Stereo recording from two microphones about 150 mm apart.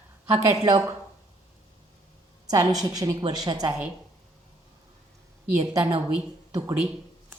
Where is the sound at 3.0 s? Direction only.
25° right (ahead or behind).